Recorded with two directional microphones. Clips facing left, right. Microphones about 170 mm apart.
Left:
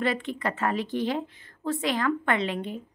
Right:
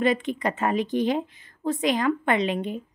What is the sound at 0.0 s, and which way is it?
A woman's voice, 20° right (ahead or behind).